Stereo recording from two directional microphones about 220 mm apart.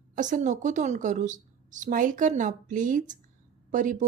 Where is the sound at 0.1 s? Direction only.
35° right (ahead or behind).